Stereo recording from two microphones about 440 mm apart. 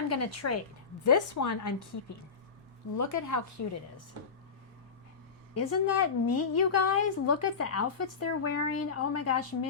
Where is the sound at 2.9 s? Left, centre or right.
Left.